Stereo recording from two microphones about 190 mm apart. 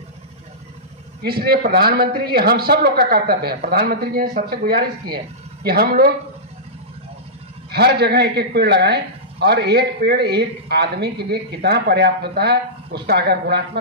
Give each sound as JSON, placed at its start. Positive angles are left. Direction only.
{"t": 1.2, "sound": "a man's voice", "side_deg": -55}
{"t": 7.7, "sound": "speech", "side_deg": -60}